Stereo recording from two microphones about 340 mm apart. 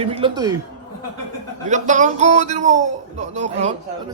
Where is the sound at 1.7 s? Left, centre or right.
Right.